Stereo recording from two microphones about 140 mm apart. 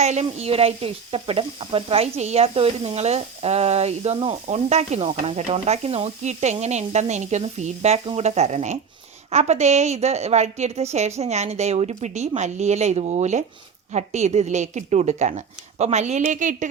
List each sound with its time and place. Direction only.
0.0 s a woman's voice: 50° right (ahead or behind)